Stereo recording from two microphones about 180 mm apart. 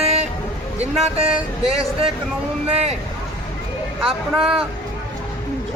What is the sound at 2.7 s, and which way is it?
Speech, 35° right (ahead or behind).